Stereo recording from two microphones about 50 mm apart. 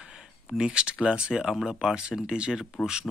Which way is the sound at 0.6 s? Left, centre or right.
Centre.